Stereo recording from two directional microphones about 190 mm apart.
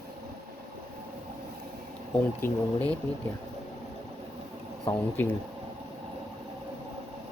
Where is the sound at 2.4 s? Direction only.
10° left (ahead or behind).